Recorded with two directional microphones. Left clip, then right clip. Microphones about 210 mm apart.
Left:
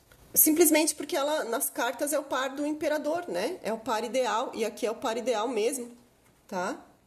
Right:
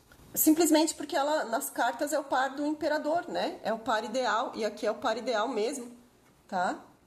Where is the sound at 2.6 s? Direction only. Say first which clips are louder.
Left 1 dB; 45° left (ahead or behind).